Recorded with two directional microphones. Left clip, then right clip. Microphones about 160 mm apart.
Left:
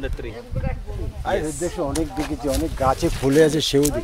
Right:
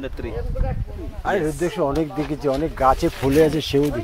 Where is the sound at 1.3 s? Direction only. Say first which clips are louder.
Right 2 dB; 85° right.